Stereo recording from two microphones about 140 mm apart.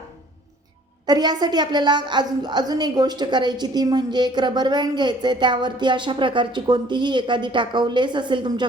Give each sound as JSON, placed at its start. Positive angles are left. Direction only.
{"t": 1.0, "sound": "a woman's voice", "side_deg": -30}